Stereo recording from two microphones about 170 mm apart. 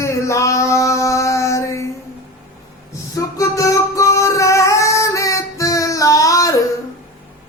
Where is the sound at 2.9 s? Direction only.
20° left (ahead or behind).